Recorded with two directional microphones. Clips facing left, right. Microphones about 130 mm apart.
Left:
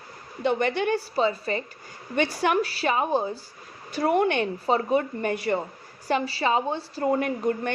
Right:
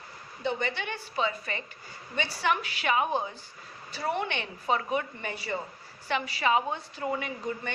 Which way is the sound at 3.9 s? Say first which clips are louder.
Left 9 dB; 50° left (ahead or behind).